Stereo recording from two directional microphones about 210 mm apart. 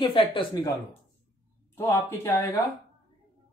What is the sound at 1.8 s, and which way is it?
Speech, 10° left (ahead or behind).